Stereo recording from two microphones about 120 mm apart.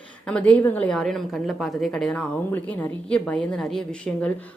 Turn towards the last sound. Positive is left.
turn(degrees=5)  # may be behind; listen again after turning